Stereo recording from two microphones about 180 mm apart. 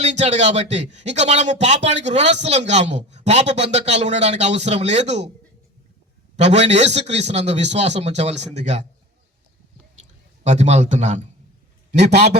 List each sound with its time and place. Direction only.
0.0 s speech: 40° right (ahead or behind)
6.3 s speech: 40° right (ahead or behind)
10.4 s speech: 40° right (ahead or behind)